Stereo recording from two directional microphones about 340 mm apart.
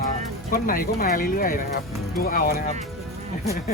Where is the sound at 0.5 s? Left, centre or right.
Left.